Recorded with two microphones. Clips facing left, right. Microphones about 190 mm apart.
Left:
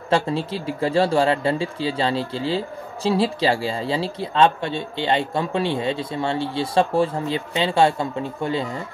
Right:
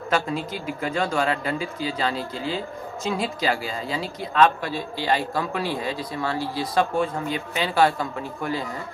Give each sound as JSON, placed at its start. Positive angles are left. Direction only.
{"t": 0.1, "sound": "speech", "side_deg": 30}